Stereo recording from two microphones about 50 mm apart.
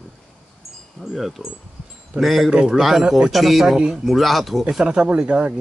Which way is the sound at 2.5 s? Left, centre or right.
Centre.